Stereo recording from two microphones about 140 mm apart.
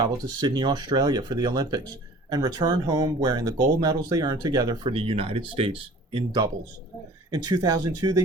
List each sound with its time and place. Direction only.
0.0 s speech: 30° right (ahead or behind)